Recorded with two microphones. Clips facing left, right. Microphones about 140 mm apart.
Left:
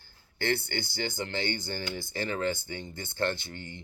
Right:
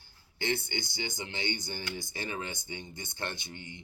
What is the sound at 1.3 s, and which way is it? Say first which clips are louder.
Speech: left 4 dB; 20° right (ahead or behind).